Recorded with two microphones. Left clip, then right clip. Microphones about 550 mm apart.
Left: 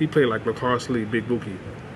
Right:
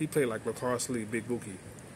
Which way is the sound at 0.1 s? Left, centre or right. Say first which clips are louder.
Left 8 dB; right.